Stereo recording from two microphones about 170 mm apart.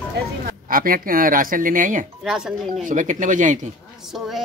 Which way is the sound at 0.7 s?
55° right (ahead or behind).